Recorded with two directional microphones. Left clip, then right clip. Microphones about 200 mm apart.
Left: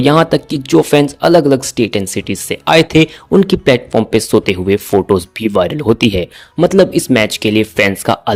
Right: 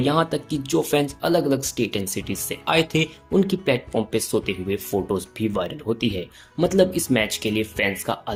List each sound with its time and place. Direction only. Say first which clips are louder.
0.0 s speech: left 11 dB; 50° left (ahead or behind)